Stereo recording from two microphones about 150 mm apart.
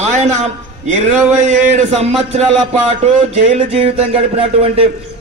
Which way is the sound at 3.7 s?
40° right (ahead or behind).